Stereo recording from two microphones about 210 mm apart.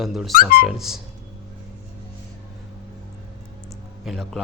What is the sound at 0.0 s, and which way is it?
Speech, centre (ahead or behind).